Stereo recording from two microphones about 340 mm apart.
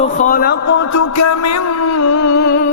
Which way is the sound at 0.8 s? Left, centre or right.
Left.